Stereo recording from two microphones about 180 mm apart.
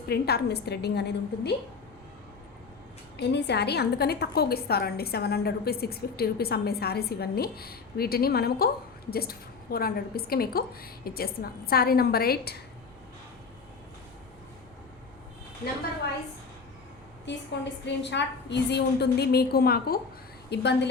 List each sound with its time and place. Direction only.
0.1 s a woman's voice: 60° left (ahead or behind)
3.2 s a woman's voice: 70° left (ahead or behind)
17.3 s a woman's voice: 75° left (ahead or behind); by 20.0 s 60° left (ahead or behind)
20.5 s a woman's voice: 70° left (ahead or behind)